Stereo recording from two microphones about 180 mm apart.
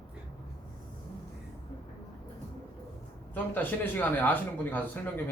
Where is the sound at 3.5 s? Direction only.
10° left (ahead or behind).